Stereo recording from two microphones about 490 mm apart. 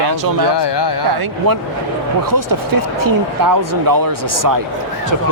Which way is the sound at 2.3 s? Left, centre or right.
Right.